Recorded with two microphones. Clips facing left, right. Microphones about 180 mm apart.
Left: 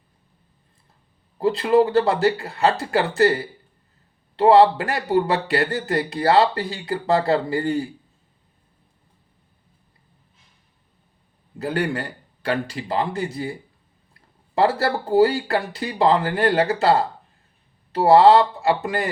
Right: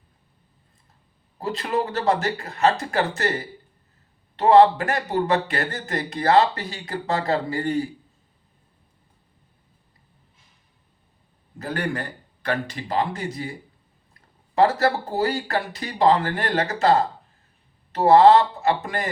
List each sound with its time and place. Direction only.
1.4 s speech: 30° left (ahead or behind)
4.4 s speech: 30° left (ahead or behind)
12.4 s speech: 30° left (ahead or behind)
14.6 s speech: 30° left (ahead or behind)
18.2 s speech: 30° left (ahead or behind)